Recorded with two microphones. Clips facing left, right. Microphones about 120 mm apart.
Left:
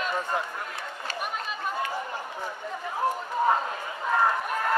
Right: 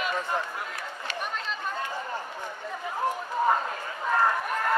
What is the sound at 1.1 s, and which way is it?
Chatter, 5° left (ahead or behind).